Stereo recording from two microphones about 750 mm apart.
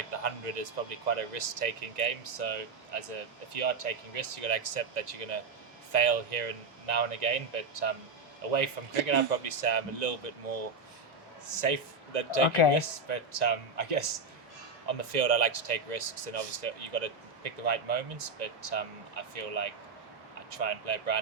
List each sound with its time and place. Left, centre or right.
0.1 s a man's voice: right
12.5 s speech: left
12.7 s speech: right